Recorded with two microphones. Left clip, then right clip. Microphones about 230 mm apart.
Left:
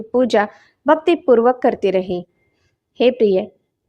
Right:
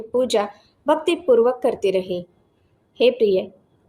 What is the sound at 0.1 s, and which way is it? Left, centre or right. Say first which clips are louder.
A woman's voice: left 4 dB; left.